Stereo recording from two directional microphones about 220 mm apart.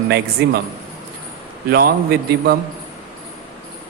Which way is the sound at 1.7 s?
45° right (ahead or behind).